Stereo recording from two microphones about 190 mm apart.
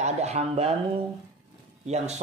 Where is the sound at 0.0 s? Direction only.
35° right (ahead or behind).